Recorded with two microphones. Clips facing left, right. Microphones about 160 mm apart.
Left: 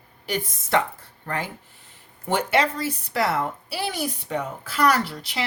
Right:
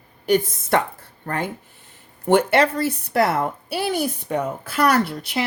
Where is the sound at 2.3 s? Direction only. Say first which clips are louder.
Right 6 dB; 55° right (ahead or behind).